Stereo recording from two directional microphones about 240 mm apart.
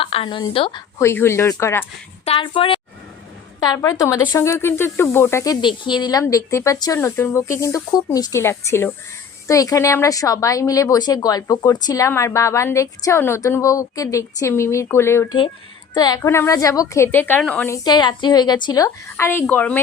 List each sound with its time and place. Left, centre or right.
0.0 s speech: left
2.2 s a woman's voice: left; by 17.7 s centre
17.7 s speech: centre